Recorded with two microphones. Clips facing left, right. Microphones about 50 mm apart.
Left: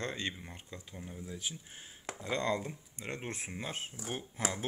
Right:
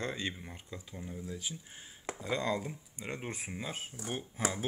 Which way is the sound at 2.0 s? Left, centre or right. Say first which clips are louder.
Even; centre.